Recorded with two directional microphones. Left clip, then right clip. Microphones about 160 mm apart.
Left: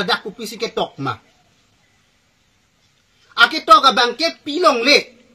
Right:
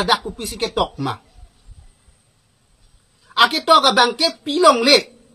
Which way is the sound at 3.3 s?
15° right (ahead or behind).